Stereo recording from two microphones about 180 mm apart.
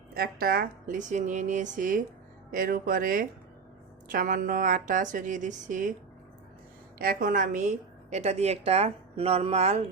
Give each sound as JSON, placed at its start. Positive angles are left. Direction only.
{"t": 0.1, "sound": "speech", "side_deg": -55}
{"t": 7.0, "sound": "a woman's voice", "side_deg": -55}